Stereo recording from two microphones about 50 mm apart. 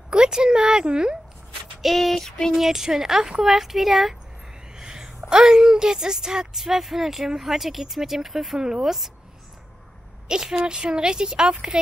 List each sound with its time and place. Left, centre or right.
0.1 s speech: centre
1.8 s a sound: centre
2.5 s speech: centre
4.7 s a sound: centre
5.3 s speech: centre
10.2 s speech: centre